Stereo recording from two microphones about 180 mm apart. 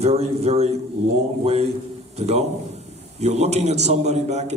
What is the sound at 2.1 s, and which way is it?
A man's voice, 35° right (ahead or behind).